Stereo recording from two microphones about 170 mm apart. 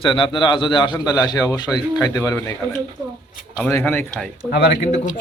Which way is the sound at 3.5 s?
10° left (ahead or behind).